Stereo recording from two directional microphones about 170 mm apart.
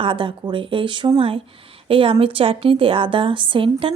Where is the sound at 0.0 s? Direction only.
30° right (ahead or behind).